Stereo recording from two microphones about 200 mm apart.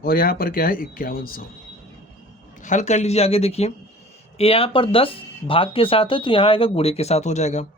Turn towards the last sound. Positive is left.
turn(degrees=35)  # may be behind; listen again after turning